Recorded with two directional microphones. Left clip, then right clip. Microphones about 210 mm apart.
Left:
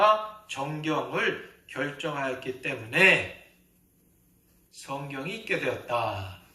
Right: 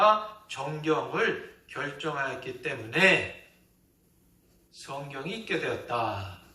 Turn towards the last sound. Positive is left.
turn(degrees=50)  # may be behind; listen again after turning